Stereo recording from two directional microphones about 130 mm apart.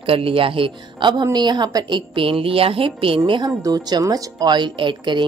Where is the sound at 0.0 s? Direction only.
45° right (ahead or behind).